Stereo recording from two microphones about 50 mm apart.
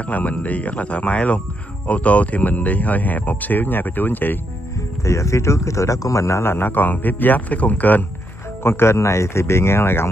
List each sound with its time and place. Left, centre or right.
0.0 s speech: left
5.0 s speech: left
6.4 s speech: left
8.6 s speech: left